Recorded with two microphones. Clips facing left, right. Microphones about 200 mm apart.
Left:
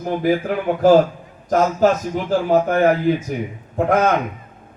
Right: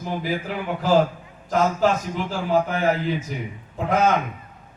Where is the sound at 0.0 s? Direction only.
55° left (ahead or behind).